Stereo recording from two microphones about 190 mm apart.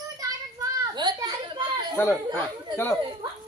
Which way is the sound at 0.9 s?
20° right (ahead or behind).